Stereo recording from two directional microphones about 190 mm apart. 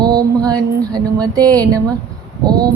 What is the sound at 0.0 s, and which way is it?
Music, 20° right (ahead or behind).